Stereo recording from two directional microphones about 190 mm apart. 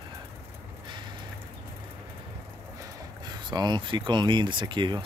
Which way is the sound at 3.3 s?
20° right (ahead or behind).